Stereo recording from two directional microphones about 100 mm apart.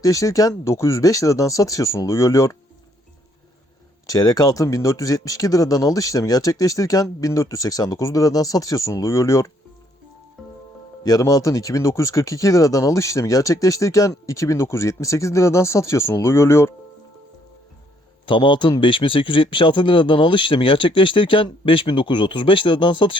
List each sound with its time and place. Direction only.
0.0 s speech: 35° left (ahead or behind)
4.0 s speech: 40° left (ahead or behind)
10.4 s music: centre (ahead or behind)
11.0 s speech: 35° left (ahead or behind)
18.3 s speech: 55° left (ahead or behind)